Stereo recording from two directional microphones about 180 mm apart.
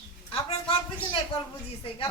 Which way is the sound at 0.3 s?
30° left (ahead or behind).